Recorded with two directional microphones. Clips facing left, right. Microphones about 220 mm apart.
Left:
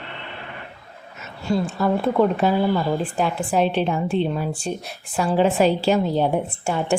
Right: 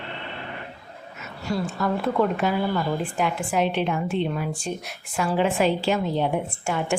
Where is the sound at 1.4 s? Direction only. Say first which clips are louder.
Left 4 dB; 30° left (ahead or behind).